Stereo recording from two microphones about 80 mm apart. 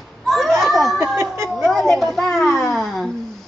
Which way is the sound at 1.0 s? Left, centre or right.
Right.